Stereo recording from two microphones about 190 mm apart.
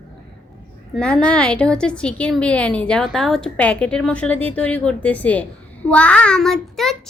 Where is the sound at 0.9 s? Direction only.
5° left (ahead or behind).